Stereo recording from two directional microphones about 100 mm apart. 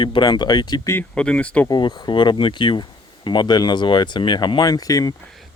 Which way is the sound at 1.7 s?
50° left (ahead or behind).